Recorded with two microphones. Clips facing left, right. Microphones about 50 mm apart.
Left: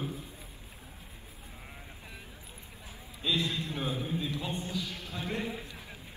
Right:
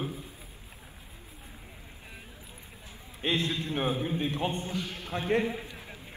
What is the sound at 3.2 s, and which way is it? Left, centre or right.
A man's voice, right.